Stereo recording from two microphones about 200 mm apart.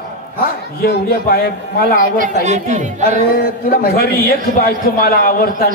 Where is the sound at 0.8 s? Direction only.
50° left (ahead or behind).